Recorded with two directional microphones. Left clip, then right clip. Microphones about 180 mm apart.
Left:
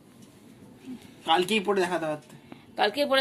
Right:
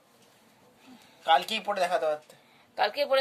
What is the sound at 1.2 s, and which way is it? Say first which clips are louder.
Speech: even; 55° right (ahead or behind).